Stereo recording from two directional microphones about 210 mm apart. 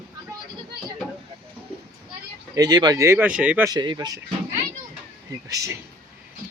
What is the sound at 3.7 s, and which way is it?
Speech, 20° right (ahead or behind).